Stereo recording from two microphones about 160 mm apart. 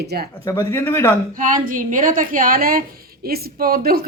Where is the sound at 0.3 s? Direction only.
15° left (ahead or behind).